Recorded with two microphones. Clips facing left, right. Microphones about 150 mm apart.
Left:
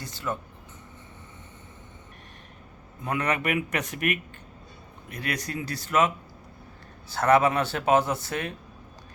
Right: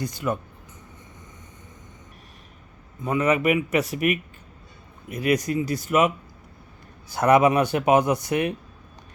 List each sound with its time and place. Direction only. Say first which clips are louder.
0.0 s speech: right 6 dB; 15° right (ahead or behind)
3.0 s speech: right 6 dB; 5° right (ahead or behind)
7.1 s speech: right 3 dB; 15° right (ahead or behind)